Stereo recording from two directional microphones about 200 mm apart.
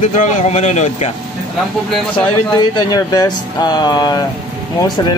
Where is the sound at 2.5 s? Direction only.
20° left (ahead or behind).